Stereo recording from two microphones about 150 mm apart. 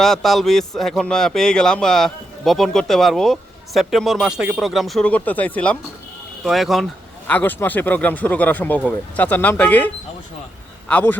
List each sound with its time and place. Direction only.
0.0 s speech: centre (ahead or behind)
6.4 s speech: centre (ahead or behind)
7.3 s speech: 10° left (ahead or behind)